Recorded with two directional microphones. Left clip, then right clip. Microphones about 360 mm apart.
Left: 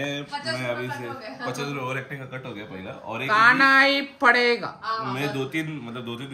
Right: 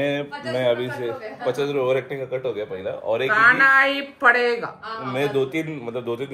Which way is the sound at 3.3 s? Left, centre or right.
Centre.